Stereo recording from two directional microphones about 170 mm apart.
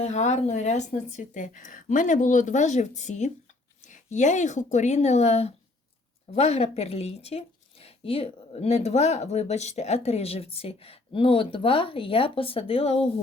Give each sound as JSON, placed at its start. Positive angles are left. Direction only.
{"t": 0.0, "sound": "a woman's voice", "side_deg": 40}